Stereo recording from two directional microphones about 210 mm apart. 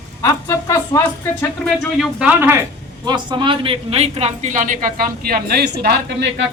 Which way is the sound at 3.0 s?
20° right (ahead or behind).